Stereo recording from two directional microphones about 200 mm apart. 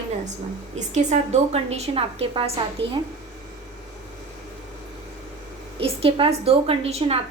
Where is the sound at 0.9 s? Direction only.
35° right (ahead or behind).